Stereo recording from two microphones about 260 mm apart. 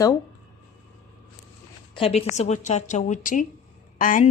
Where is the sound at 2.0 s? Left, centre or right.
Left.